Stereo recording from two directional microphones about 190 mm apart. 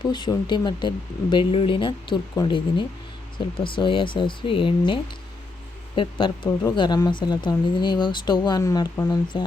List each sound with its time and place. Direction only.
0.0 s speech: 25° left (ahead or behind)
6.0 s speech: 25° left (ahead or behind)